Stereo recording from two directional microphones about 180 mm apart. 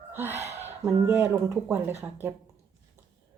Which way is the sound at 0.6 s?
15° right (ahead or behind).